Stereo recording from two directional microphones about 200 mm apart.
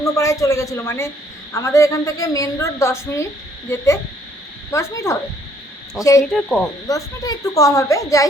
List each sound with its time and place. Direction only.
0.2 s a woman's voice: 15° left (ahead or behind)
4.7 s a woman's voice: 15° left (ahead or behind)
6.3 s speech: 5° left (ahead or behind)
6.8 s a woman's voice: 15° left (ahead or behind)